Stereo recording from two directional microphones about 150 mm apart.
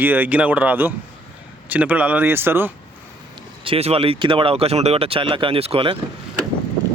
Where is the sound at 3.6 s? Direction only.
40° right (ahead or behind).